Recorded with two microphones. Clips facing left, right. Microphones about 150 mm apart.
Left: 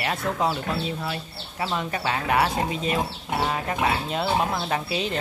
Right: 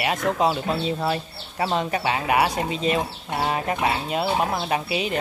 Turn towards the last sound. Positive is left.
turn(degrees=-10)  # may be behind; listen again after turning